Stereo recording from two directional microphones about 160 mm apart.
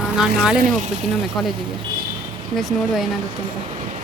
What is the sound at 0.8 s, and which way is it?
Speech, 45° right (ahead or behind).